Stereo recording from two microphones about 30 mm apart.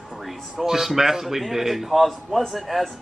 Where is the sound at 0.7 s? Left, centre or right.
Centre.